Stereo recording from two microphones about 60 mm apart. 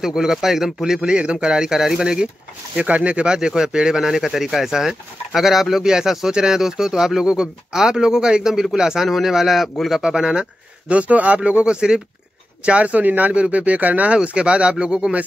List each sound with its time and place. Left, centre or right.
0.0 s speech: centre
2.7 s speech: right